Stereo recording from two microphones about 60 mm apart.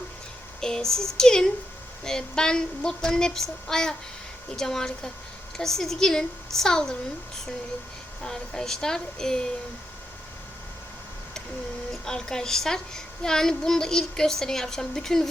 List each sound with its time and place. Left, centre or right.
0.6 s a sound: centre
1.1 s a woman's voice: centre
8.2 s a woman's voice: centre
12.0 s a woman's voice: centre